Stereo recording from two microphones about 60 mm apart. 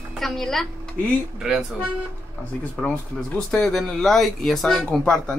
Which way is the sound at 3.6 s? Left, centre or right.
Centre.